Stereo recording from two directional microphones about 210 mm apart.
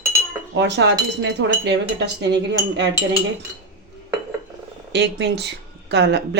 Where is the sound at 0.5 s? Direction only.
55° right (ahead or behind).